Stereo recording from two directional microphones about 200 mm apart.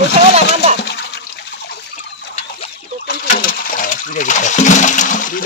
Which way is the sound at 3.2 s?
45° left (ahead or behind).